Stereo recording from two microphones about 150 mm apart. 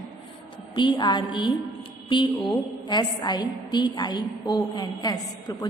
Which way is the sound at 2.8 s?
30° left (ahead or behind).